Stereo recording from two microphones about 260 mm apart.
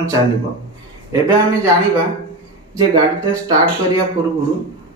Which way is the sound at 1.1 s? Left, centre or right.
Centre.